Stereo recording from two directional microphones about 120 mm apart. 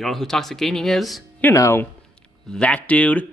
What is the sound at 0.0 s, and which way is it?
Speech, centre (ahead or behind).